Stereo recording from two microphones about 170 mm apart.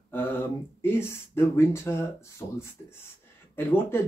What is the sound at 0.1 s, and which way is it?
Speech, 10° left (ahead or behind).